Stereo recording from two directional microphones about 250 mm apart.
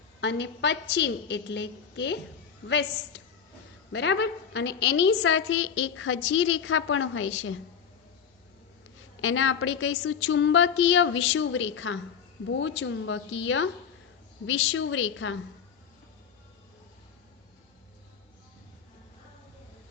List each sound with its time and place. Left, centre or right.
0.2 s a woman's voice: left
9.2 s a woman's voice: left